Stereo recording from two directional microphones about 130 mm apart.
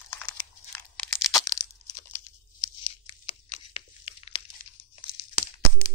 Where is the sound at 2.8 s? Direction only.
45° left (ahead or behind).